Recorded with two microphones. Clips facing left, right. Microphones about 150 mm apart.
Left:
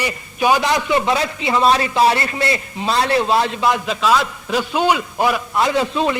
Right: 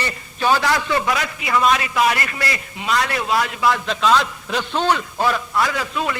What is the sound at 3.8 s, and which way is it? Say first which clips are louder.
A man's voice: left 1 dB; 5° left (ahead or behind).